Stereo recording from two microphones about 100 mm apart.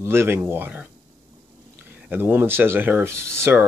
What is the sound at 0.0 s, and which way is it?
Speech, 25° right (ahead or behind).